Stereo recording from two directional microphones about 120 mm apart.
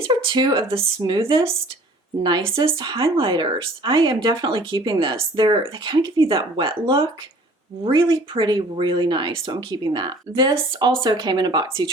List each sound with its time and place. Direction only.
0.0 s speech: 40° right (ahead or behind)